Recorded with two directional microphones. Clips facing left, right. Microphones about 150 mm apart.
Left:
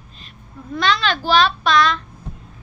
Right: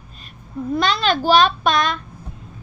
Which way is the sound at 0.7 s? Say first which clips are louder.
Right 1 dB; 45° right (ahead or behind).